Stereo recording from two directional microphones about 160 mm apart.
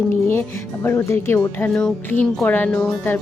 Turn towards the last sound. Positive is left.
turn(degrees=10)  # may be behind; listen again after turning